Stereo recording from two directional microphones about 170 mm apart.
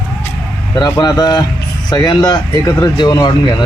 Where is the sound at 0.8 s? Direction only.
20° left (ahead or behind).